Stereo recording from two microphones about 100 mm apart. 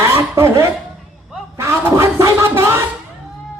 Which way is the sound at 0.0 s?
25° right (ahead or behind).